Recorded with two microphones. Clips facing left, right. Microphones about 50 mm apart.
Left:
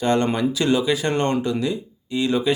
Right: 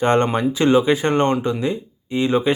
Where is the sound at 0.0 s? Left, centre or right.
Right.